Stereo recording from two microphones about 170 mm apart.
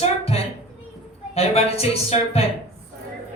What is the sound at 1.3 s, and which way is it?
Speech, 35° left (ahead or behind).